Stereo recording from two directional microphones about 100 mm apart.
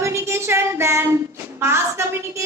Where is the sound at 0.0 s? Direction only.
25° right (ahead or behind).